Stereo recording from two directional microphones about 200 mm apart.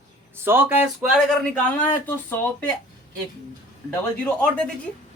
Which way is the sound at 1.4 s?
5° left (ahead or behind).